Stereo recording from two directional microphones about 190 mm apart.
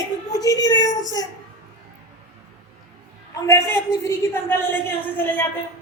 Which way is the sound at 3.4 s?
15° left (ahead or behind).